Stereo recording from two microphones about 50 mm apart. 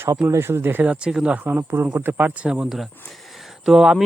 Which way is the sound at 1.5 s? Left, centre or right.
Right.